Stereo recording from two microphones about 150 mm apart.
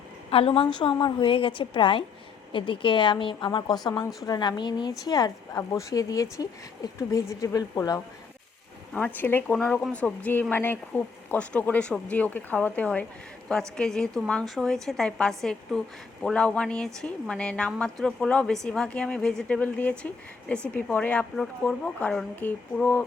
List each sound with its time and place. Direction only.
0.3 s a woman's voice: 40° left (ahead or behind); by 8.0 s 20° left (ahead or behind)
8.9 s speech: 10° left (ahead or behind)